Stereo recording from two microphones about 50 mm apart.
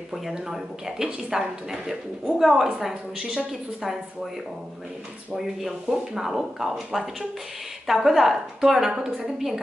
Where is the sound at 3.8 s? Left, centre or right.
Centre.